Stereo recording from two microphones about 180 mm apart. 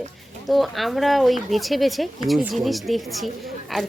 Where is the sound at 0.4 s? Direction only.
Centre (ahead or behind).